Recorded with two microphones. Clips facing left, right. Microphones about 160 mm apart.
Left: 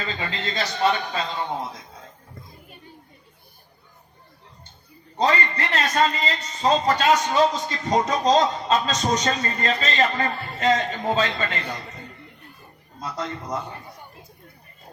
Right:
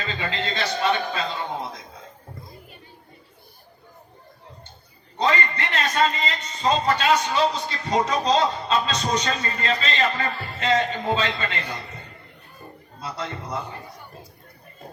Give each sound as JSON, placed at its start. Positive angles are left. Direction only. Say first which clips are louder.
{"t": 0.1, "sound": "a man's voice", "louder": "right 1 dB", "side_deg": 40}
{"t": 5.1, "sound": "a man's voice", "louder": "left 1 dB", "side_deg": 40}
{"t": 13.0, "sound": "speech", "louder": "left 1 dB", "side_deg": 40}